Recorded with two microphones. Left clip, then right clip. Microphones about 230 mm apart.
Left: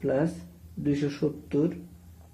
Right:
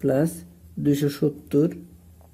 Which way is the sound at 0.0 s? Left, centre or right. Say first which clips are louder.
Right 4 dB; right.